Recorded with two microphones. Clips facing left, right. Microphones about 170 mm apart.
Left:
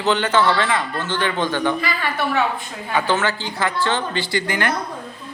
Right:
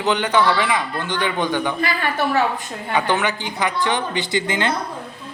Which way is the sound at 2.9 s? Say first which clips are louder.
Even; 15° right (ahead or behind).